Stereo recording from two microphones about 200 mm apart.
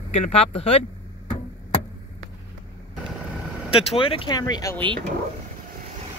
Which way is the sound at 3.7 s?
25° left (ahead or behind).